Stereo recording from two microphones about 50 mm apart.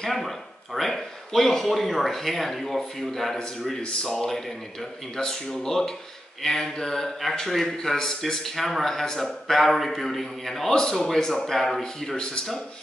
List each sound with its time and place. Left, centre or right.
0.7 s a man's voice: centre
3.8 s speech: centre
4.1 s a man's voice: centre